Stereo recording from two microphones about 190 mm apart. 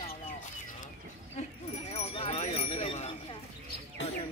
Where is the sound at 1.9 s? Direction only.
35° left (ahead or behind).